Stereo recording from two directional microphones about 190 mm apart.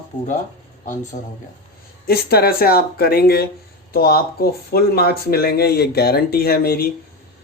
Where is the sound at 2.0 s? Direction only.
55° left (ahead or behind).